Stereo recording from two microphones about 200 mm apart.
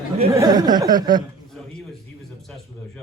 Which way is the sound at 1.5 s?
Centre (ahead or behind).